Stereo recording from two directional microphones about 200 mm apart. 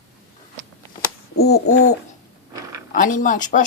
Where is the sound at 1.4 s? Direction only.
50° left (ahead or behind).